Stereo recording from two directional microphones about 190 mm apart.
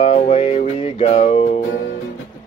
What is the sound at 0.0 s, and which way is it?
Music, 35° left (ahead or behind).